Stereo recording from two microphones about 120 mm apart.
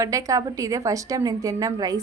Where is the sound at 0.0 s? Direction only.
25° right (ahead or behind).